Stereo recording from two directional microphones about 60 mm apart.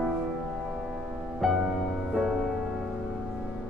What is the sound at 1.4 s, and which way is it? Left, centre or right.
Music, centre.